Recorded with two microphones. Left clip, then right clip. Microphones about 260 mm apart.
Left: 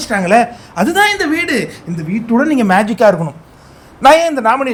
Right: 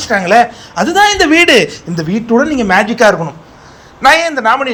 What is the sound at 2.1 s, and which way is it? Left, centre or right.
Speech, centre.